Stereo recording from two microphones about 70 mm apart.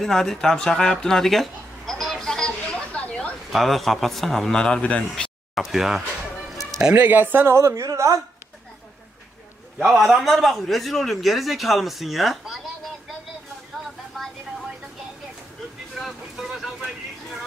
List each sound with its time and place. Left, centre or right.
0.0 s a man's voice: centre
1.9 s a sound: centre
3.5 s a man's voice: centre
5.5 s a man's voice: centre
6.9 s a man's voice: right
9.7 s a man's voice: centre
16.0 s vehicle: centre